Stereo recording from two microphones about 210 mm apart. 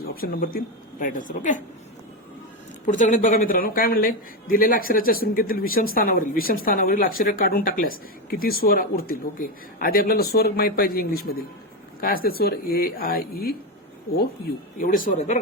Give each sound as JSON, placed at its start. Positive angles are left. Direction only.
{"t": 0.0, "sound": "speech", "side_deg": 45}
{"t": 2.8, "sound": "speech", "side_deg": 35}
{"t": 14.8, "sound": "speech", "side_deg": 40}